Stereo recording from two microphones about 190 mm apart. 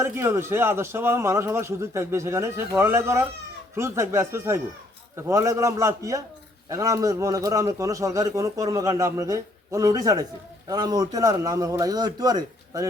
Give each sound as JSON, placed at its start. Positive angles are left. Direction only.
{"t": 0.0, "sound": "a man's voice", "side_deg": -10}